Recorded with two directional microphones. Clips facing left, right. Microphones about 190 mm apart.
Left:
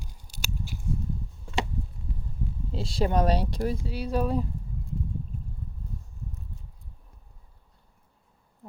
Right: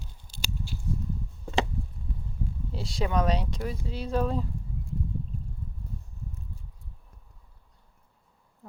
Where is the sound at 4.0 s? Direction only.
15° left (ahead or behind).